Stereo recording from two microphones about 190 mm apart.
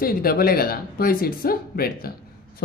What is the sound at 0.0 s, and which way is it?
Speech, 50° left (ahead or behind).